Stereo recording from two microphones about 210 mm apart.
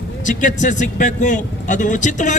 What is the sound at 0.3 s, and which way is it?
Speech, 35° left (ahead or behind).